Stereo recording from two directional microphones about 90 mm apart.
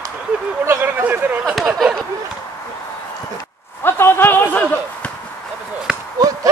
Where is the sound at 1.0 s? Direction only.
20° right (ahead or behind).